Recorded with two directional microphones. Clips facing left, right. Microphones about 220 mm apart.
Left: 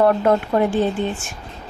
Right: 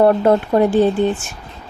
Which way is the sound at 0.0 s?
30° right (ahead or behind).